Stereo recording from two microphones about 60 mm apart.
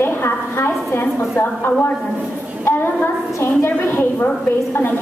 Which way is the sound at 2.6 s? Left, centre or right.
Left.